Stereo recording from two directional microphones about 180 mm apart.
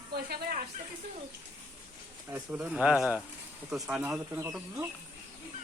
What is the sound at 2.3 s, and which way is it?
Speech, 10° right (ahead or behind).